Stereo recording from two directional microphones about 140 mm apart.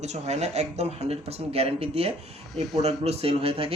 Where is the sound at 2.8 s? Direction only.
45° right (ahead or behind).